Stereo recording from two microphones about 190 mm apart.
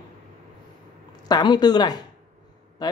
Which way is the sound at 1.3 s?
20° left (ahead or behind).